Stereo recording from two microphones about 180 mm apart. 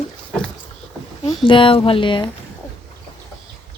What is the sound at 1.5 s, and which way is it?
Speech, 30° left (ahead or behind).